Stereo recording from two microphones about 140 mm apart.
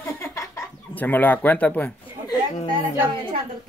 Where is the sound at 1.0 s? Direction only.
15° left (ahead or behind).